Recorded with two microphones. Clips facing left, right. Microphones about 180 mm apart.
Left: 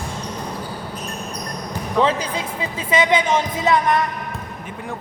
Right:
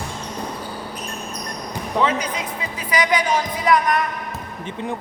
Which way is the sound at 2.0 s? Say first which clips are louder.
Left 2 dB; 30° left (ahead or behind).